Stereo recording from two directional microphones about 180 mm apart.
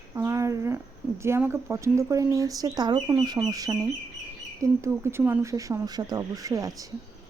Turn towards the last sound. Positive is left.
turn(degrees=-20)  # may be behind; listen again after turning